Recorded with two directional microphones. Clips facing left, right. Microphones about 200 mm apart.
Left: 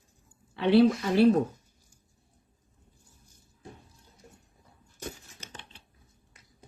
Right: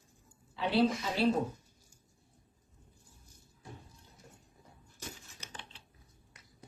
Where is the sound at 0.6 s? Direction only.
65° left (ahead or behind).